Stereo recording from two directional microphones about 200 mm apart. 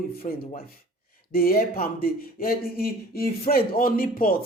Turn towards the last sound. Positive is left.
turn(degrees=45)  # may be behind; listen again after turning